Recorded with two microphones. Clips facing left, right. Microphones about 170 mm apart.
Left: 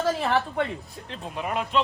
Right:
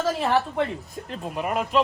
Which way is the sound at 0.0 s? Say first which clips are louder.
Right 1 dB; centre (ahead or behind).